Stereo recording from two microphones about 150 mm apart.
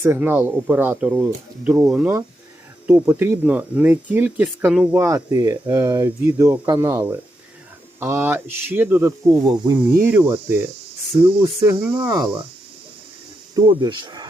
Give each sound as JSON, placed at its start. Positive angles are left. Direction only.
{"t": 0.0, "sound": "speech", "side_deg": -15}
{"t": 9.7, "sound": "speech", "side_deg": -15}
{"t": 13.7, "sound": "speech", "side_deg": -30}